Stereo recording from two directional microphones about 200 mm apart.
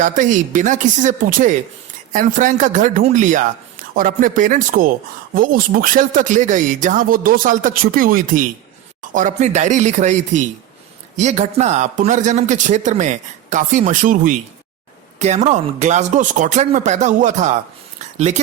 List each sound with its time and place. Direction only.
0.0 s a man's voice: 40° right (ahead or behind)